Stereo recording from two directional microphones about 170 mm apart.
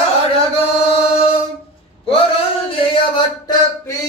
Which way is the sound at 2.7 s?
30° left (ahead or behind).